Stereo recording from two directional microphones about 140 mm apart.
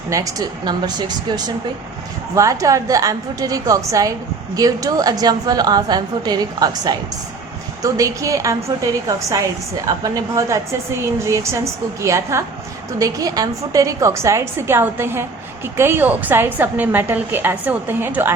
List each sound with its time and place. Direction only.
0.1 s a woman's voice: 25° right (ahead or behind)